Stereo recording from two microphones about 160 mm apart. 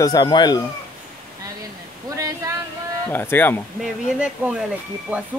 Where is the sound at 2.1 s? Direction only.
20° right (ahead or behind).